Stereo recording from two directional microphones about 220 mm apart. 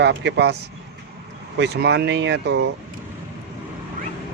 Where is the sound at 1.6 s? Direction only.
50° right (ahead or behind).